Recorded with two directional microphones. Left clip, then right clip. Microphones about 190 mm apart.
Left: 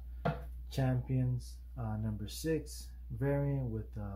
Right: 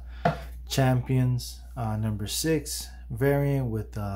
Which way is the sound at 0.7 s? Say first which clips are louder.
Right 12 dB; 25° right (ahead or behind).